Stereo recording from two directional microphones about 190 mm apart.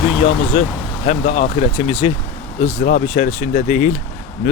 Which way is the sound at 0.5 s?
40° left (ahead or behind).